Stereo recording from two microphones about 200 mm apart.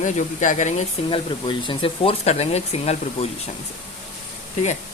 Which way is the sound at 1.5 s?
25° left (ahead or behind).